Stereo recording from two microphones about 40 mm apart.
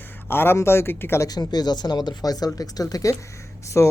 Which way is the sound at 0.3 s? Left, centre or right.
Left.